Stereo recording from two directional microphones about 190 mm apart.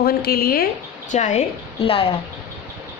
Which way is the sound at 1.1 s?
40° left (ahead or behind).